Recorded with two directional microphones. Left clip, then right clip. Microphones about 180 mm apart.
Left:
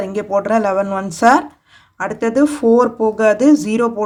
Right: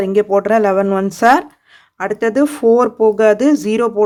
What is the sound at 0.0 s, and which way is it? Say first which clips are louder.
Speech: right 4 dB; 35° right (ahead or behind).